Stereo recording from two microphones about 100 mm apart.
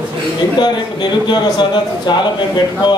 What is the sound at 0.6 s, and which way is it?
A man's voice, 50° left (ahead or behind).